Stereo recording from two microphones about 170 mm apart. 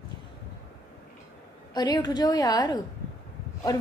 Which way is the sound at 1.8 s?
25° left (ahead or behind).